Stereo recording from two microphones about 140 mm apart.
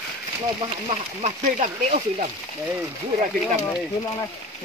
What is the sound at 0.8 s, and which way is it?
Speech, 55° right (ahead or behind).